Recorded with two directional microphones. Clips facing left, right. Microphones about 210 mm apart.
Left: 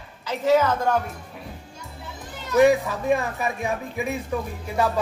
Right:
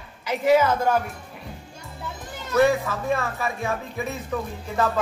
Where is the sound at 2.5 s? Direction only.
15° left (ahead or behind).